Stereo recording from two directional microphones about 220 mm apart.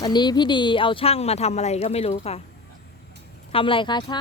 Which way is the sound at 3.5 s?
25° left (ahead or behind).